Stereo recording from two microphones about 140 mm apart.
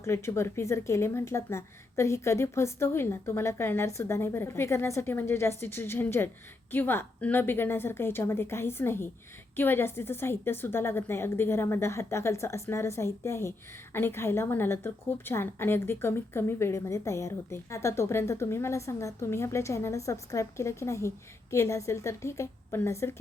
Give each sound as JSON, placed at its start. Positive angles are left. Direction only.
{"t": 0.0, "sound": "a woman's voice", "side_deg": 20}